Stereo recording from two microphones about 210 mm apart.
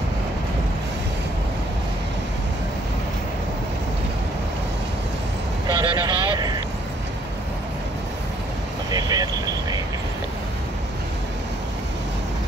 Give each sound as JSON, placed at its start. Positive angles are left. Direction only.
{"t": 5.7, "sound": "vehicle", "side_deg": -20}
{"t": 8.9, "sound": "vehicle", "side_deg": -20}